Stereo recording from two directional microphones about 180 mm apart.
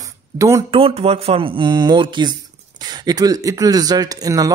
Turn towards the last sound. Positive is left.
turn(degrees=-20)  # may be behind; listen again after turning